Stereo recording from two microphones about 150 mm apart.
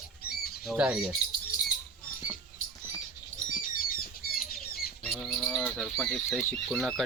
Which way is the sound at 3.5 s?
70° left (ahead or behind).